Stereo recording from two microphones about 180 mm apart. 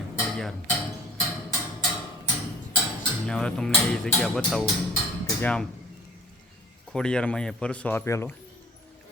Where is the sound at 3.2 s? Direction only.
5° left (ahead or behind).